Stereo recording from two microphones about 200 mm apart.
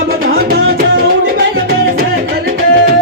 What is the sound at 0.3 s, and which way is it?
Music, 50° right (ahead or behind).